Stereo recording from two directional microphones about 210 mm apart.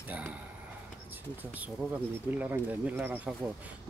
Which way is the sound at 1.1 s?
10° right (ahead or behind).